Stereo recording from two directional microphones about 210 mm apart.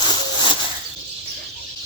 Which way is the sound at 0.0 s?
20° left (ahead or behind).